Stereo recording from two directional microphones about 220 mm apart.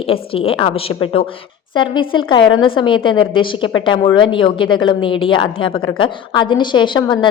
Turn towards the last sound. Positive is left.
turn(degrees=20)  # may be behind; listen again after turning